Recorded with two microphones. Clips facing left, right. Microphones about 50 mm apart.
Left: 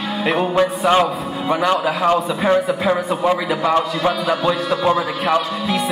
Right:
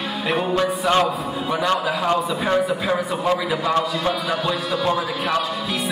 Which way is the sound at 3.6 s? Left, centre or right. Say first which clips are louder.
Left 4 dB; centre.